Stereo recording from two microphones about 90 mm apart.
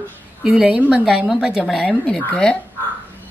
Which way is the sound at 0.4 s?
10° right (ahead or behind).